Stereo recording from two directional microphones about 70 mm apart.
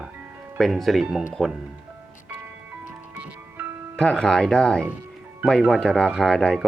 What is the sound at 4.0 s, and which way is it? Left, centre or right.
Speech, centre.